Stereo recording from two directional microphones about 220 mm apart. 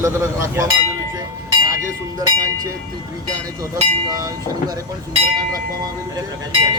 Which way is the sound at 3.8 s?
15° right (ahead or behind).